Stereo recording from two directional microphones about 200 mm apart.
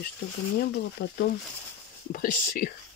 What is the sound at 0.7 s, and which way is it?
Speech, 60° left (ahead or behind).